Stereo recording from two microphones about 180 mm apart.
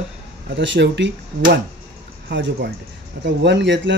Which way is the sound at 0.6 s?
80° right.